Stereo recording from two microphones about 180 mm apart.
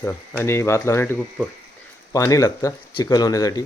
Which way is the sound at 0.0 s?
15° left (ahead or behind).